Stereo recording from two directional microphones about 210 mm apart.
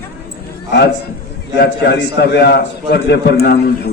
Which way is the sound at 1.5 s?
50° left (ahead or behind).